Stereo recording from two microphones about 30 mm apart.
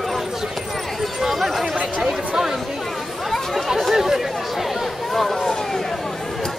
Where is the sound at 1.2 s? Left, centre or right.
Centre.